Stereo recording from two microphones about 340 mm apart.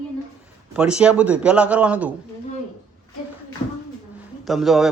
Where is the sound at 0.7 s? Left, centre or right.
Centre.